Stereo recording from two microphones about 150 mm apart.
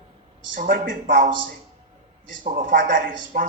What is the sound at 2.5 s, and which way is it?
Speech, 70° right (ahead or behind).